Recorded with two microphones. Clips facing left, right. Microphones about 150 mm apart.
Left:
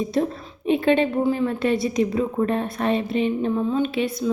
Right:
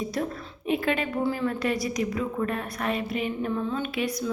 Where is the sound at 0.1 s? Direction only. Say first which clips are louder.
Left 7 dB; 25° left (ahead or behind).